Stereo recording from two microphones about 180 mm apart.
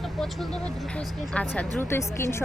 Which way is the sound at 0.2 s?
Centre (ahead or behind).